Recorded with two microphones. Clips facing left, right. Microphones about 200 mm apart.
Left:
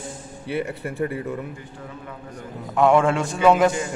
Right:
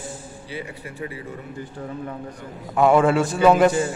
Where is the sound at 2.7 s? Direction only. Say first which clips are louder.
Right 1 dB; 5° right (ahead or behind).